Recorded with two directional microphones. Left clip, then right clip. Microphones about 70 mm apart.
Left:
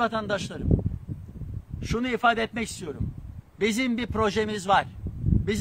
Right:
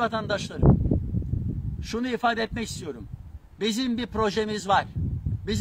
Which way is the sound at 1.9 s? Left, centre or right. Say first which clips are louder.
Left 2 dB; right.